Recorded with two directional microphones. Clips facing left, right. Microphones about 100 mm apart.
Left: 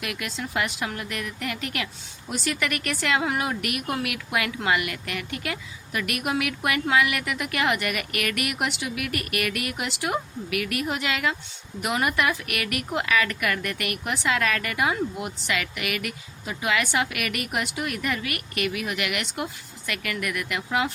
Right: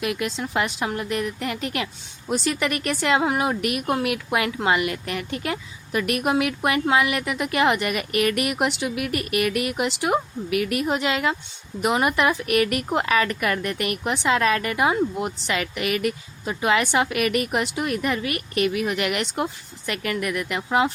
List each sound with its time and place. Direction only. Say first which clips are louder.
0.0 s speech: right 6 dB; 25° right (ahead or behind)